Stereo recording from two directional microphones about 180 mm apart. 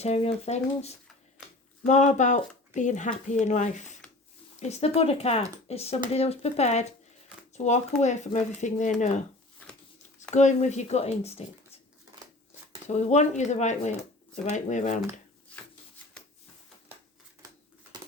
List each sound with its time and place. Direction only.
0.0 s speech: 35° left (ahead or behind)
12.9 s speech: 40° left (ahead or behind)